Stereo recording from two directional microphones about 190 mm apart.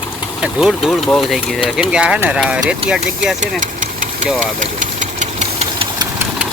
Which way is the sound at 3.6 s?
40° right (ahead or behind).